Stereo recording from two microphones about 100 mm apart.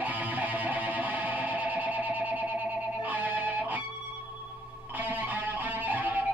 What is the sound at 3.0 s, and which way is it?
Neigh, 15° right (ahead or behind).